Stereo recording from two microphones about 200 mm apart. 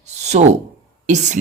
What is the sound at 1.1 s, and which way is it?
Speech, 35° right (ahead or behind).